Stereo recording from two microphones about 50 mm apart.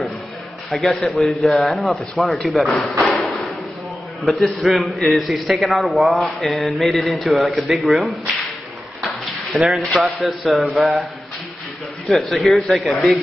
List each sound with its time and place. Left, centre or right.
0.7 s a man's voice: centre
3.1 s a sound: centre
4.2 s a man's voice: centre
9.2 s a sound: centre
10.2 s a man's voice: centre
12.1 s a man's voice: centre